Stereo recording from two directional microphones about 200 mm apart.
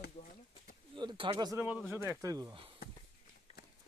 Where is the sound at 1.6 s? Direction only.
5° right (ahead or behind).